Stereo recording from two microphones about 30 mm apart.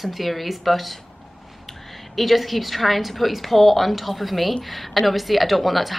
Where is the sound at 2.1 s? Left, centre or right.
Centre.